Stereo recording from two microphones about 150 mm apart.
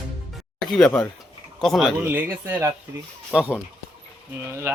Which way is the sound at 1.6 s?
Centre (ahead or behind).